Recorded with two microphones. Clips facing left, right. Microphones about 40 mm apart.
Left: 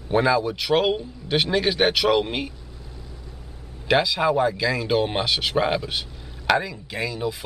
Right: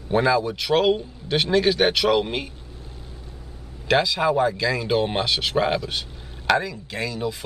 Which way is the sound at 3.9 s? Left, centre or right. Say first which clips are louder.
Even; centre.